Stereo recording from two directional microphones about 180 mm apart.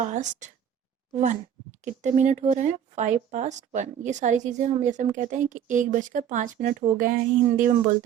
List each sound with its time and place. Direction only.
0.0 s speech: 40° right (ahead or behind)